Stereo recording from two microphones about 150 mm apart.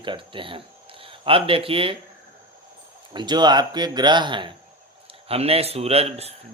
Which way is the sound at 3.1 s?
30° right (ahead or behind).